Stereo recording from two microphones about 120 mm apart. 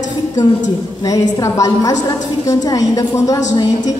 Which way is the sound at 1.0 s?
30° left (ahead or behind).